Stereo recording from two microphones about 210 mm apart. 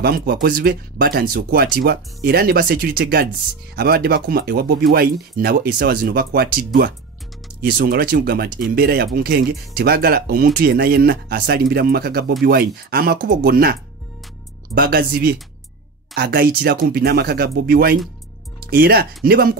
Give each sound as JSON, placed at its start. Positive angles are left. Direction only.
{"t": 0.0, "sound": "speech", "side_deg": -45}
{"t": 14.8, "sound": "speech", "side_deg": -45}